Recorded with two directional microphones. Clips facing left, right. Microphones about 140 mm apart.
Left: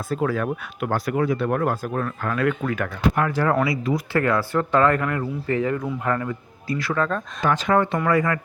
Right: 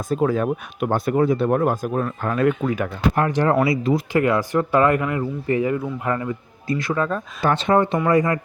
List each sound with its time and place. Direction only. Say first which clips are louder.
0.1 s speech: right 4 dB; 20° right (ahead or behind)
7.4 s speech: right 2 dB; 30° right (ahead or behind)